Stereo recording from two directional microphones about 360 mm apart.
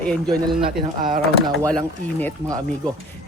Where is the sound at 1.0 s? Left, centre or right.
Right.